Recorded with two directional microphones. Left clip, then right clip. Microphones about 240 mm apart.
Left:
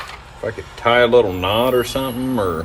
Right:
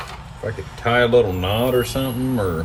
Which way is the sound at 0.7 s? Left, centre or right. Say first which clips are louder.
Left 3 dB; left.